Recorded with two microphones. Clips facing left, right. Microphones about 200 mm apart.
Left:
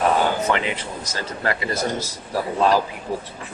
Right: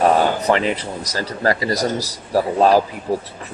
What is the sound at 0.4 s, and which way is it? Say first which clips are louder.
Speech: right 5 dB; 35° right (ahead or behind).